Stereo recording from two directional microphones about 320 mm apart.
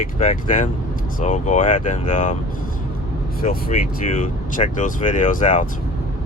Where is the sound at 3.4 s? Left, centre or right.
Left.